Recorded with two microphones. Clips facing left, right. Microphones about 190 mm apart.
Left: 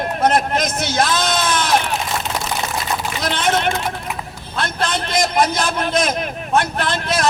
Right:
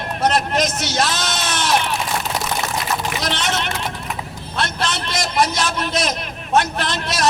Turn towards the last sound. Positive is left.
turn(degrees=55)  # may be behind; listen again after turning